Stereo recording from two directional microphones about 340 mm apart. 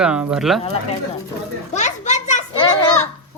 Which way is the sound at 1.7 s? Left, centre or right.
Centre.